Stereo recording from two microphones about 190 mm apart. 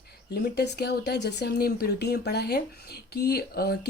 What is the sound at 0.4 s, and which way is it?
Speech, 60° left (ahead or behind).